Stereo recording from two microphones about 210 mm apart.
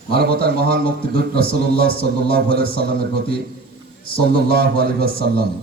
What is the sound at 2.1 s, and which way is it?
Speech, 55° right (ahead or behind).